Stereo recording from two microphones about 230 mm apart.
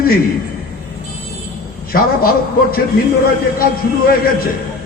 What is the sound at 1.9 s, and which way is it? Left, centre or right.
Speech, left.